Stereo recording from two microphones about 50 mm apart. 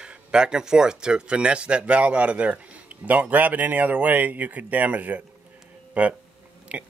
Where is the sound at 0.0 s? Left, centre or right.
Centre.